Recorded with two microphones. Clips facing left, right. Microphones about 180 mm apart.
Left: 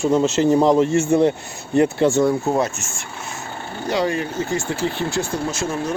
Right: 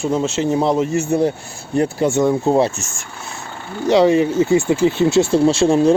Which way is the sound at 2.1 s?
20° right (ahead or behind).